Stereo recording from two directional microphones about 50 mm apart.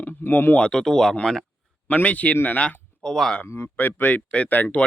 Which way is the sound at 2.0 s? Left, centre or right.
Left.